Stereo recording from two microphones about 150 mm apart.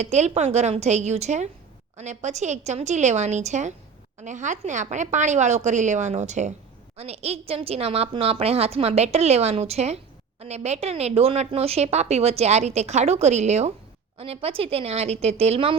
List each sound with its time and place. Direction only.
0.0 s a woman's voice: 50° right (ahead or behind)